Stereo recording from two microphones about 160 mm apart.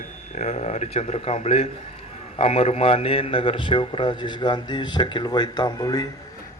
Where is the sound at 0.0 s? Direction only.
45° left (ahead or behind).